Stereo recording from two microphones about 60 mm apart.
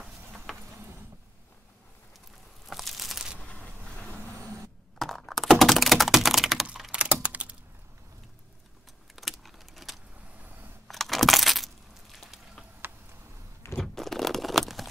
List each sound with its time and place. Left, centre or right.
2.7 s crumpling: centre
3.3 s a sound: left
4.9 s computer keyboard: centre
6.9 s typing: centre
9.1 s computer keyboard: centre
10.9 s a sound: centre
13.7 s crunch: centre